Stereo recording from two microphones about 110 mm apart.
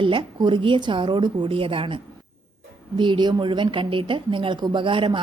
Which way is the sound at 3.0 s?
45° right (ahead or behind).